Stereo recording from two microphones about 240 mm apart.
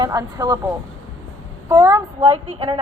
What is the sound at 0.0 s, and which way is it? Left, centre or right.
Speech, centre.